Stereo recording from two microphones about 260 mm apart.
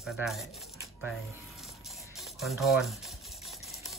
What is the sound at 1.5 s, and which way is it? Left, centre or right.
Music, centre.